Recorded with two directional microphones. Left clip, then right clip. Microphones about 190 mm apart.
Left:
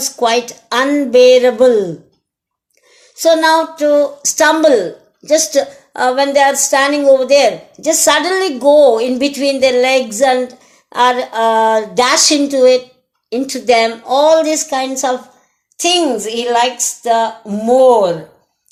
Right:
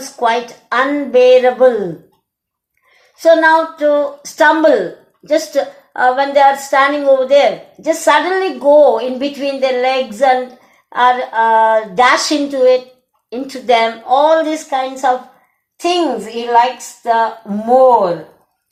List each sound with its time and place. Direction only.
0.0 s speech: 35° left (ahead or behind)
3.2 s speech: 35° left (ahead or behind)
17.0 s a sound: 35° left (ahead or behind)
17.7 s speech: 35° left (ahead or behind)